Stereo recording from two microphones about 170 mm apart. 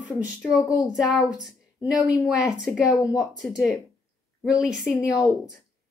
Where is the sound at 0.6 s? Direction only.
20° left (ahead or behind).